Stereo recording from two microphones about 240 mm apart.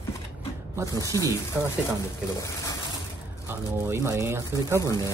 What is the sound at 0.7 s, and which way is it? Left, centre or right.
Speech, centre.